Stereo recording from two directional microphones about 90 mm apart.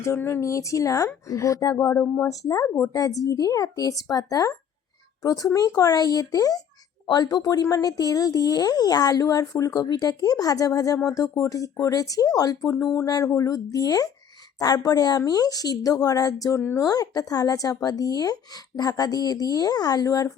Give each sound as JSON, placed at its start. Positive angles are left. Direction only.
{"t": 0.2, "sound": "speech", "side_deg": 30}
{"t": 16.6, "sound": "speech", "side_deg": 25}
{"t": 16.8, "sound": "speech", "side_deg": 40}